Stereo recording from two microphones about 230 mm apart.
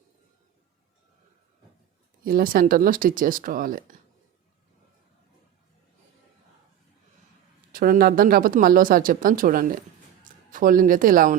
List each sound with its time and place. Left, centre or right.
2.2 s speech: right
7.7 s speech: right